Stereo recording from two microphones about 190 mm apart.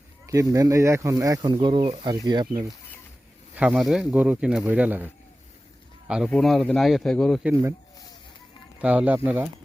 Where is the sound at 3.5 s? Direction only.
5° right (ahead or behind).